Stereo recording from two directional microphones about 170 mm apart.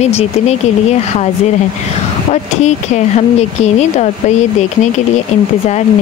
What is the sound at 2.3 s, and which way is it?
Speech, 40° left (ahead or behind).